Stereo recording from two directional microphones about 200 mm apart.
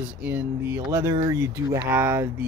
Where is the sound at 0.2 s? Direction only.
10° right (ahead or behind).